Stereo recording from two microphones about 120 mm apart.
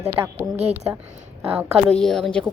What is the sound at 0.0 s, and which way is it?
A woman's voice, 20° right (ahead or behind).